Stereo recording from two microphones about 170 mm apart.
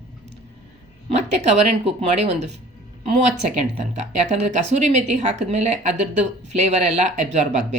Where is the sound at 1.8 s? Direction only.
35° right (ahead or behind).